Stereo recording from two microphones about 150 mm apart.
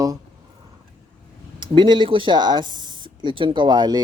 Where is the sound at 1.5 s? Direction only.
30° right (ahead or behind).